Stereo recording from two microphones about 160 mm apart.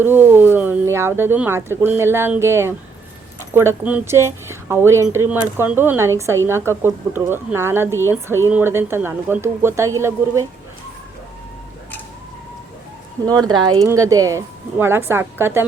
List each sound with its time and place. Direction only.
0.0 s speech: 15° right (ahead or behind)
13.3 s speech: 25° right (ahead or behind)